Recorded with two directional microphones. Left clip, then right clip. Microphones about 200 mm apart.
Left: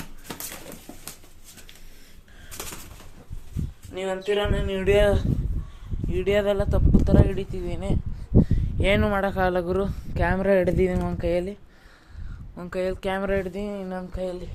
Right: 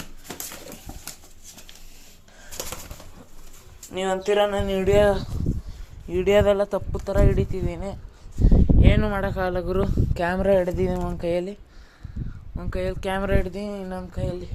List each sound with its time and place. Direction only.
3.9 s music: 20° right (ahead or behind)
4.9 s speech: 10° right (ahead or behind)
6.1 s speech: 20° right (ahead or behind)
8.4 s speech: 10° left (ahead or behind)
9.7 s speech: centre (ahead or behind)
10.6 s speech: 20° left (ahead or behind); by 11.5 s centre (ahead or behind)
12.5 s speech: 5° left (ahead or behind)